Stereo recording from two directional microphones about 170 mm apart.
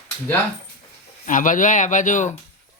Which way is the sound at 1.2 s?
50° left (ahead or behind).